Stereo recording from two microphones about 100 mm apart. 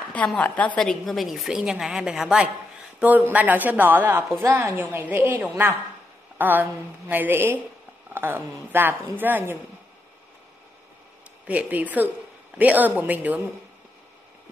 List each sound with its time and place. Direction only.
0.4 s a woman's voice: 15° left (ahead or behind)
0.7 s a woman's voice: 5° left (ahead or behind); by 9.6 s 20° right (ahead or behind)
11.4 s speech: 15° right (ahead or behind)